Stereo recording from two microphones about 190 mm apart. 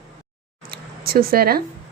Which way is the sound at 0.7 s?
50° right (ahead or behind).